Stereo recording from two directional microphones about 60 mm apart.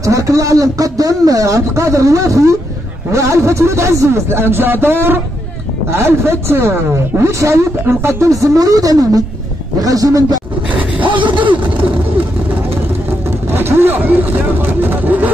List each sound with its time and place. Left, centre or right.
0.0 s a man's voice: right
4.3 s speech: right
7.2 s a man's voice: right
10.8 s a sound: right
13.5 s vehicle: right